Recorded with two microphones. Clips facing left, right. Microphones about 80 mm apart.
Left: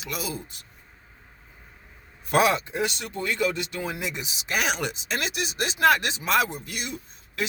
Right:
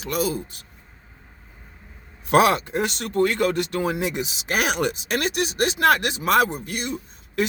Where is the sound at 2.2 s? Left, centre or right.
Right.